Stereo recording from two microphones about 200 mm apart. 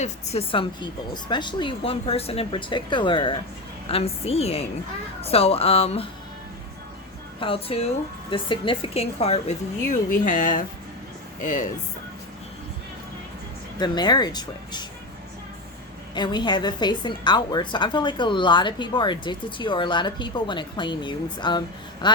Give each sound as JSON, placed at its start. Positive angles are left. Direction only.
{"t": 0.0, "sound": "a woman's voice", "side_deg": 30}
{"t": 7.3, "sound": "a woman's voice", "side_deg": 25}
{"t": 13.7, "sound": "a woman's voice", "side_deg": 20}
{"t": 16.1, "sound": "a woman's voice", "side_deg": 20}
{"t": 22.0, "sound": "a sound", "side_deg": 20}